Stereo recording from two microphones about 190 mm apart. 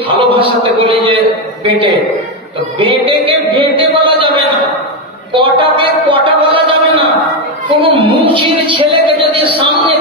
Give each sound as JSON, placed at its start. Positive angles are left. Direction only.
{"t": 0.2, "sound": "a man's voice", "side_deg": -25}